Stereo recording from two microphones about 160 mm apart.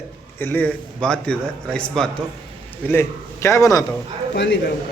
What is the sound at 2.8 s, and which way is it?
Speech, 15° left (ahead or behind).